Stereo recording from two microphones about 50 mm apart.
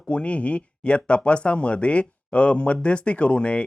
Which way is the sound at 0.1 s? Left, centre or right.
Left.